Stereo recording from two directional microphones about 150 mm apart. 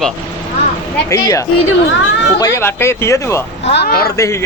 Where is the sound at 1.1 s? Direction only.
20° left (ahead or behind).